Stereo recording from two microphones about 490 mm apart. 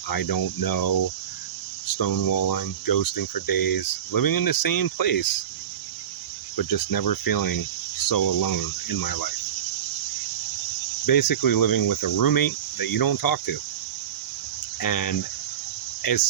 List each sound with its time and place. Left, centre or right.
0.1 s cricket: left
6.6 s cricket: left
11.0 s cricket: left
14.8 s speech: left